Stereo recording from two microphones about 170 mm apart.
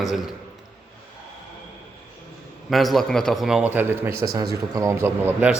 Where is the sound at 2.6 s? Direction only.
Centre (ahead or behind).